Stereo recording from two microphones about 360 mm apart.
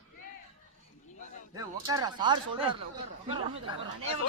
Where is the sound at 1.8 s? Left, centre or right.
Centre.